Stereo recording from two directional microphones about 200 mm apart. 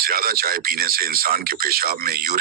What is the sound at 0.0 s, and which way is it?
Speech, 50° right (ahead or behind).